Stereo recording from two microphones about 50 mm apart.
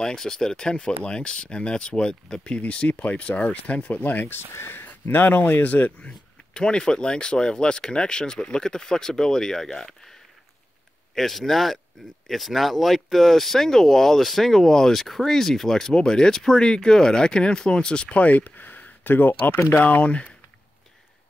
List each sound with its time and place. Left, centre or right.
0.0 s speech: centre
2.6 s speech: left
4.3 s speech: left
5.1 s speech: left
6.0 s speech: centre
11.1 s speech: centre; by 19.6 s left
19.7 s speech: left